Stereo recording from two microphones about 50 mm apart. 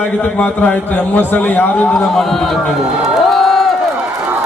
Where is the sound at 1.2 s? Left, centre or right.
Left.